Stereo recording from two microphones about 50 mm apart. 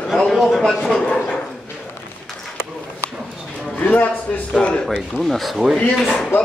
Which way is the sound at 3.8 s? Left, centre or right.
Left.